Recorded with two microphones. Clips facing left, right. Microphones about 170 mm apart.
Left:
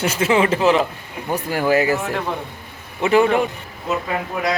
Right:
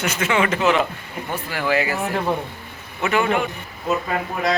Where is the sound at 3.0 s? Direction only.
30° left (ahead or behind).